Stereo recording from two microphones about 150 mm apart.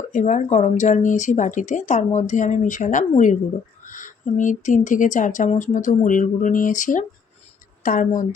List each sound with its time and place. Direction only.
0.1 s speech: 55° left (ahead or behind)